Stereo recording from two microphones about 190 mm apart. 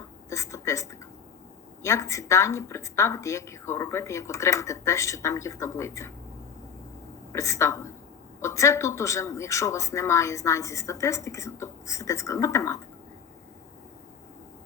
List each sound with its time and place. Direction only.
0.3 s a woman's voice: 15° left (ahead or behind)
7.3 s speech: 15° left (ahead or behind)